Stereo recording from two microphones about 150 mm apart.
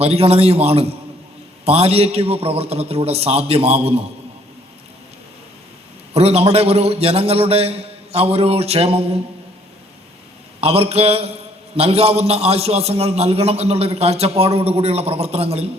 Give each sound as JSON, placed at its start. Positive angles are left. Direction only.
{"t": 0.0, "sound": "a man's voice", "side_deg": -45}
{"t": 6.1, "sound": "a man's voice", "side_deg": -45}
{"t": 10.6, "sound": "a man's voice", "side_deg": -40}